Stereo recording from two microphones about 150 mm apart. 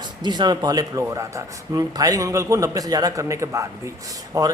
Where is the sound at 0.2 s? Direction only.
30° right (ahead or behind).